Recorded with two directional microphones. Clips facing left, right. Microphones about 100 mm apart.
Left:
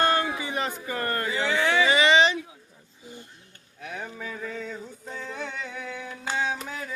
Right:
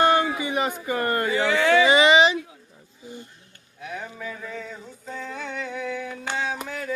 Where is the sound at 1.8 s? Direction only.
20° right (ahead or behind).